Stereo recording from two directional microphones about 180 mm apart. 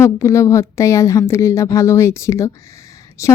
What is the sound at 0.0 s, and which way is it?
Speech, 15° left (ahead or behind).